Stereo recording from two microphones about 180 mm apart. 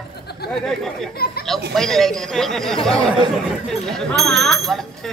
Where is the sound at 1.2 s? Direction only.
55° left (ahead or behind).